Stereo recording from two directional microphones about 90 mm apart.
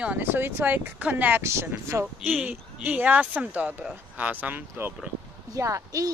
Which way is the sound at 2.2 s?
15° right (ahead or behind).